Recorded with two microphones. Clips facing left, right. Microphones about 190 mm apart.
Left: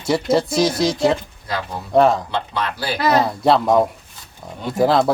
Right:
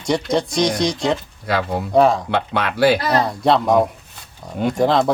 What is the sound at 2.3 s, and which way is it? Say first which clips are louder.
Speech: right 3 dB; 65° right (ahead or behind).